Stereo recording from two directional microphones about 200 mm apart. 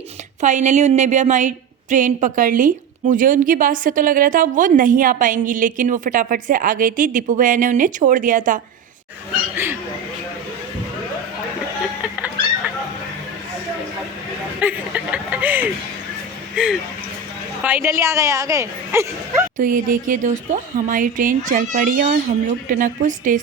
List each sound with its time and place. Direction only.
0.4 s a woman's voice: 35° right (ahead or behind)
14.6 s a sound: 5° right (ahead or behind)
16.6 s a woman's voice: 5° right (ahead or behind)
19.5 s a woman's voice: 40° right (ahead or behind)